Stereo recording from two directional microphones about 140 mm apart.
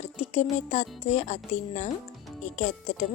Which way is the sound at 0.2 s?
50° left (ahead or behind).